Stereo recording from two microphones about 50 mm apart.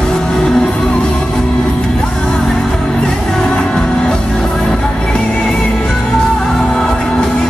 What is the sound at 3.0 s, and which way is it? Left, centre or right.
Music, centre.